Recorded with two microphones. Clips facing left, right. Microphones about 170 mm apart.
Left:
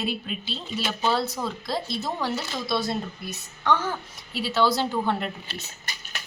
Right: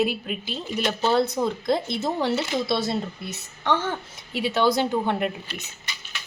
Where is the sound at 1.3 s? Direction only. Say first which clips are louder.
Right 6 dB; 20° right (ahead or behind).